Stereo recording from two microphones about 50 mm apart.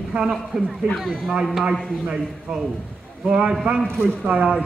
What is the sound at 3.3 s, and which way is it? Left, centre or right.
Speech, centre.